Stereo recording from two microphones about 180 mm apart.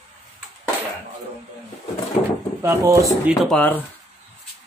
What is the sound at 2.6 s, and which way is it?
Speech, 15° right (ahead or behind).